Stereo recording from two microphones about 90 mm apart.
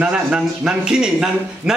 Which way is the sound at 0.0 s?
10° right (ahead or behind).